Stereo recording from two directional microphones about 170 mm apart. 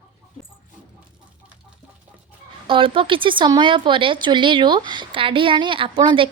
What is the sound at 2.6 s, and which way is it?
Speech, 30° right (ahead or behind).